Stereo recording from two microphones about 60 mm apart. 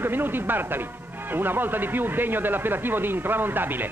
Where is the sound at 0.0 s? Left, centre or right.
Right.